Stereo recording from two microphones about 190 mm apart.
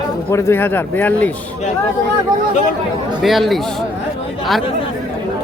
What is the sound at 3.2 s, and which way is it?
Speech, centre (ahead or behind).